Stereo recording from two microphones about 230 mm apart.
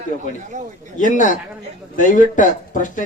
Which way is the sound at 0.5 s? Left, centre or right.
Right.